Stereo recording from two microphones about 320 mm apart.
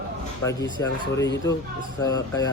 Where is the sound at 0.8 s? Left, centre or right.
Centre.